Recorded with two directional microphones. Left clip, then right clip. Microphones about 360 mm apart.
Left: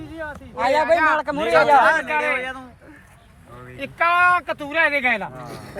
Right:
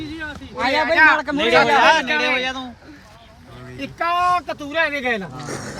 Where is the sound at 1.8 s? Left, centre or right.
Right.